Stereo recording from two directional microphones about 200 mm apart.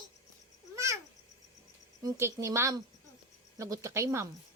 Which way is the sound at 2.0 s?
15° right (ahead or behind).